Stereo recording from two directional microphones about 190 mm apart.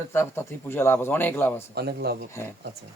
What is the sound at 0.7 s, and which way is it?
Speech, 10° left (ahead or behind).